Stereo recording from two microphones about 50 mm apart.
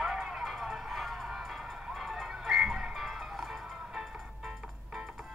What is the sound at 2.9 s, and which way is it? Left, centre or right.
Music, centre.